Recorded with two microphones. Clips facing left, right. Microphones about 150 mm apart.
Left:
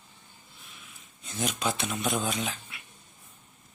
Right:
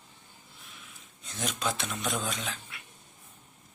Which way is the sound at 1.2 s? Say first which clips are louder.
Left 3 dB; 5° left (ahead or behind).